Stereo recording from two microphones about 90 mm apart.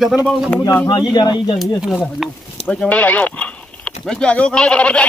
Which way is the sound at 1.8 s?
5° right (ahead or behind).